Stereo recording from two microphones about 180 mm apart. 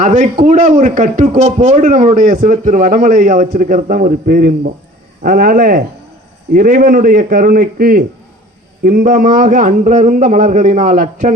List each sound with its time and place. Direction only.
0.0 s a man's voice: 45° right (ahead or behind)